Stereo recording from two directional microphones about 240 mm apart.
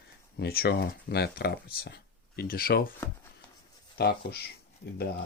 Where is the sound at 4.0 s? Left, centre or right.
Left.